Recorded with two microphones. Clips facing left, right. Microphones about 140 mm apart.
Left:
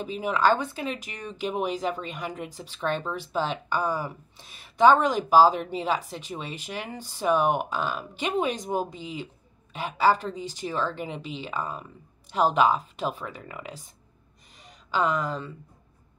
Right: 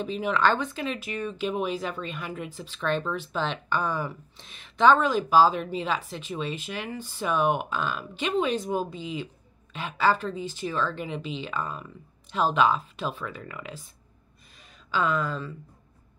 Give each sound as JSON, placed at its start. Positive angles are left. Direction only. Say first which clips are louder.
{"t": 0.0, "sound": "speech", "louder": "even", "side_deg": 10}
{"t": 15.0, "sound": "speech", "louder": "left 1 dB", "side_deg": 15}